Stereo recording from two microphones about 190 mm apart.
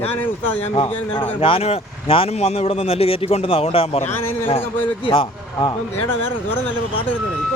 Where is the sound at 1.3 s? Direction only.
30° left (ahead or behind).